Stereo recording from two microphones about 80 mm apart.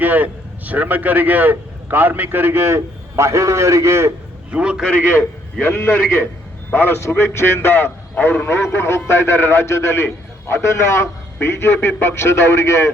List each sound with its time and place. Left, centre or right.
0.0 s a man's voice: right
4.5 s a man's voice: centre
4.9 s a man's voice: left
8.4 s a man's voice: left